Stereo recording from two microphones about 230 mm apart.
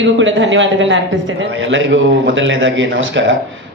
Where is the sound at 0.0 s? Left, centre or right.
Right.